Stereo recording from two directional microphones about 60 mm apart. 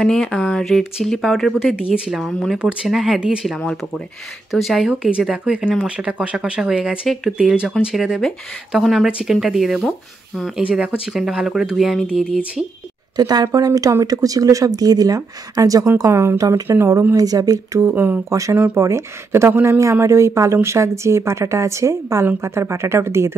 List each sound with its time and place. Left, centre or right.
0.0 s speech: centre
1.6 s speech: centre
2.1 s speech: centre
2.6 s speech: centre
3.4 s speech: centre
4.5 s speech: centre
5.7 s speech: centre
12.1 s speech: centre
13.1 s speech: right
16.1 s speech: right
16.3 s speech: right
17.9 s speech: right
18.3 s speech: right
18.8 s speech: right